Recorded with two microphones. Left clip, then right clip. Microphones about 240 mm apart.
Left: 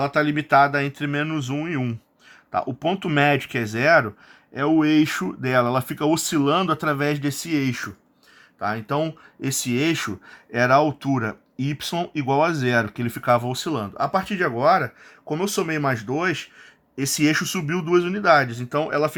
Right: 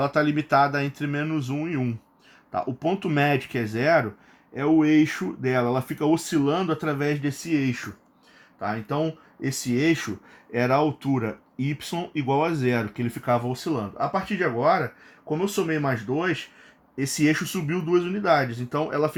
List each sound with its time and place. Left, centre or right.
0.0 s speech: centre